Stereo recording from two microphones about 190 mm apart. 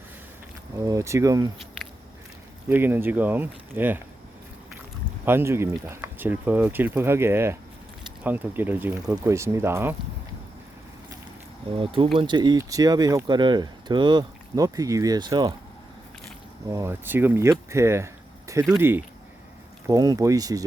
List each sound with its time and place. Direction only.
0.8 s speech: 15° right (ahead or behind)
2.6 s speech: 10° right (ahead or behind)
5.2 s speech: 10° right (ahead or behind)
11.7 s speech: 25° right (ahead or behind)
16.7 s speech: 10° right (ahead or behind)